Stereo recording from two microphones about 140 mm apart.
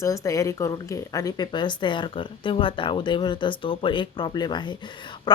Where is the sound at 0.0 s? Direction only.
25° left (ahead or behind).